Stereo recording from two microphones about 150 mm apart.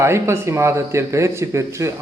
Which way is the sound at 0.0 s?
20° right (ahead or behind).